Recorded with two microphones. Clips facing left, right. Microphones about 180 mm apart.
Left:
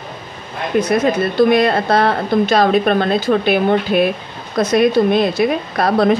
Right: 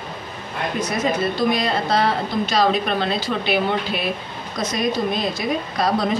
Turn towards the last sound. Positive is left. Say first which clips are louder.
# left 6 dB
turn(degrees=60)  # may be behind; listen again after turning